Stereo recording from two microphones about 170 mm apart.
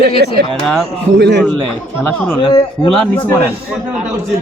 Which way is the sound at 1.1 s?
90° right.